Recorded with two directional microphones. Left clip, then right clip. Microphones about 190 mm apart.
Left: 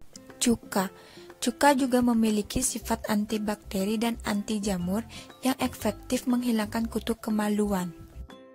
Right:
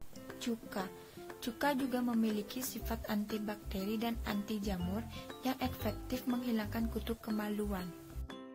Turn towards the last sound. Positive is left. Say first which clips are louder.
# left 11 dB
turn(degrees=50)  # may be behind; listen again after turning